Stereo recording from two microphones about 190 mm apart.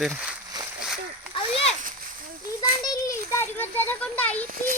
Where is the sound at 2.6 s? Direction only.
20° left (ahead or behind).